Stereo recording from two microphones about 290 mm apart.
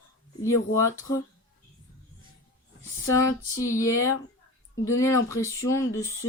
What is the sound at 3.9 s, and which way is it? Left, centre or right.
Speech, left.